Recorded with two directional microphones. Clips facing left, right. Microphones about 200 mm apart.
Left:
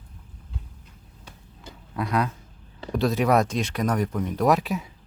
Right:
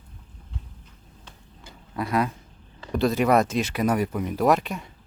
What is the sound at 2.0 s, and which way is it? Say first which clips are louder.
Speech: right 1 dB; centre (ahead or behind).